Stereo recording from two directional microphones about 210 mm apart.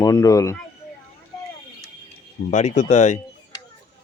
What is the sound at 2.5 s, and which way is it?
Speech, 35° left (ahead or behind).